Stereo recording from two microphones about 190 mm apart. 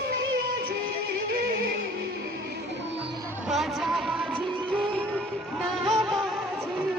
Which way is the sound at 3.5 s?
Centre (ahead or behind).